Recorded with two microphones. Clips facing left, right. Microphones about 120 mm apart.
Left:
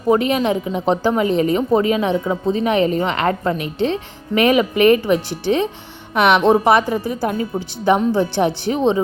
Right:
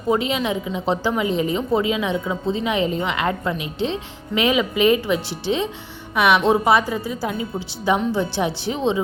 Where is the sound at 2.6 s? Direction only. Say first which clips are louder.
Left 6 dB; 60° left (ahead or behind).